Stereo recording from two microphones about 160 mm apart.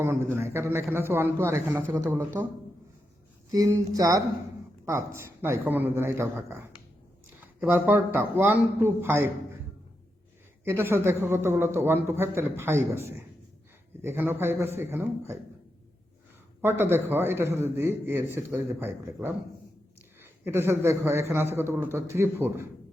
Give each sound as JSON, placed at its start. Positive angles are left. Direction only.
{"t": 0.0, "sound": "a man's voice", "side_deg": -15}
{"t": 3.5, "sound": "a man's voice", "side_deg": -20}
{"t": 7.6, "sound": "a man's voice", "side_deg": -15}
{"t": 10.6, "sound": "a man's voice", "side_deg": -15}
{"t": 16.6, "sound": "a man's voice", "side_deg": -15}
{"t": 20.4, "sound": "a man's voice", "side_deg": -15}